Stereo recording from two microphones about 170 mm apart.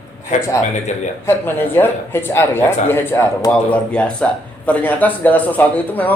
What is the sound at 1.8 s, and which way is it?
A man's voice, 15° left (ahead or behind).